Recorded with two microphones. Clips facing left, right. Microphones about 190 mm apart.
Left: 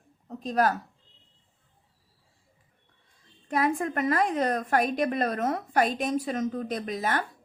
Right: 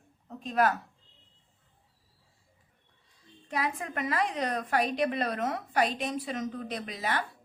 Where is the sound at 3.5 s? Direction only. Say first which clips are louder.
Left 7 dB; 50° left (ahead or behind).